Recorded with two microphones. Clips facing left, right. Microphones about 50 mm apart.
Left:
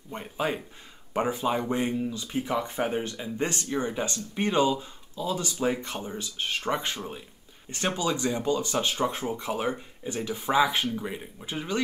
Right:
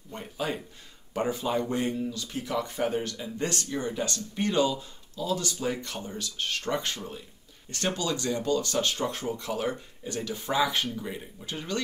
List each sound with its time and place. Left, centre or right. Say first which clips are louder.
0.1 s speech: left 3 dB; left